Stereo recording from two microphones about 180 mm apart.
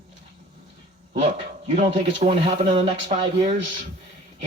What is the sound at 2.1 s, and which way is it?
A man's voice, 35° right (ahead or behind).